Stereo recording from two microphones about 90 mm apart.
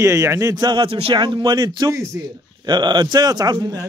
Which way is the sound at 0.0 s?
35° right (ahead or behind).